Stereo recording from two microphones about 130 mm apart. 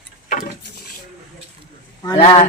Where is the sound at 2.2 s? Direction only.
50° left (ahead or behind).